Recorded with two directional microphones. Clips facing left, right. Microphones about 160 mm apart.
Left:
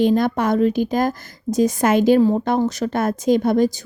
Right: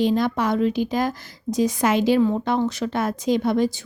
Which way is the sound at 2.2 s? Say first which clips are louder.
Left 3 dB; 40° left (ahead or behind).